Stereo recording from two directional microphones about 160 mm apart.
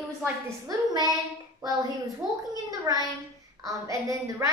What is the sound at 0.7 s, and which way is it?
A woman's voice, 25° right (ahead or behind).